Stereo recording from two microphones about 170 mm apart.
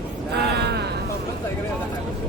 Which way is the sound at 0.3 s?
75° right (ahead or behind).